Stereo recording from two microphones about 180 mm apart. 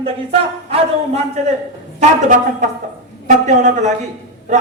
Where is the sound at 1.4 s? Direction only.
40° right (ahead or behind).